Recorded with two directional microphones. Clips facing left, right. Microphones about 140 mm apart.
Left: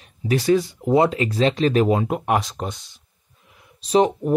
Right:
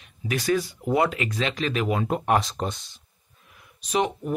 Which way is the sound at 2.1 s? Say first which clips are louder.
Left 1 dB; 10° left (ahead or behind).